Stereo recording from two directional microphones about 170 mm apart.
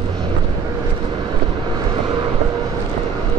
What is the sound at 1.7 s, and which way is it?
Vehicle, 25° right (ahead or behind).